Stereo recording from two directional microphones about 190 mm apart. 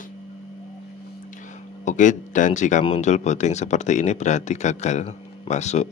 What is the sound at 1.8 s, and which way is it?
Speech, 40° left (ahead or behind).